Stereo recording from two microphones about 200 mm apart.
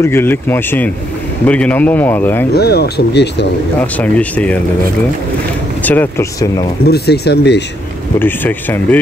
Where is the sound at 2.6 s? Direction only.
50° left (ahead or behind).